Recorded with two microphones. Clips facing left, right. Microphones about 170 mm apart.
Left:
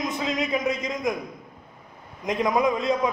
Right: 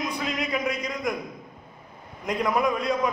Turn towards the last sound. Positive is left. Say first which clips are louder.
# left 2 dB
turn(degrees=20)  # may be behind; listen again after turning